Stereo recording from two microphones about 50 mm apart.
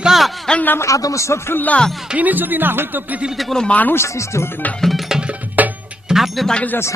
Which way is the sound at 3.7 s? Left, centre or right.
Left.